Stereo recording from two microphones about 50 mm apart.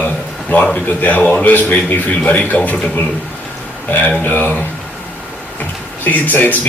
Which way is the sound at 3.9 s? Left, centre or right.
Left.